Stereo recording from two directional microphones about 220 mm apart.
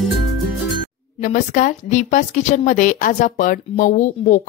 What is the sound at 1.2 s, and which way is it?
Speech, 35° left (ahead or behind).